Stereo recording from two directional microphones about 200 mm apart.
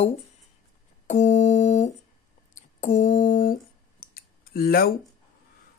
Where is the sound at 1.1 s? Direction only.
35° left (ahead or behind).